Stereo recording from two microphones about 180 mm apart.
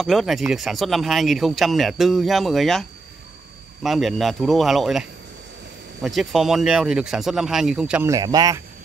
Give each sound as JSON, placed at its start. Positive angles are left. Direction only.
{"t": 0.0, "sound": "speech", "side_deg": 0}
{"t": 3.8, "sound": "speech", "side_deg": 0}
{"t": 6.0, "sound": "speech", "side_deg": 0}
{"t": 8.1, "sound": "speech", "side_deg": -20}